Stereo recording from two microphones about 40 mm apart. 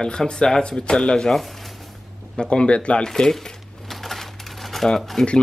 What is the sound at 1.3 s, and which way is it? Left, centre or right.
Speech, centre.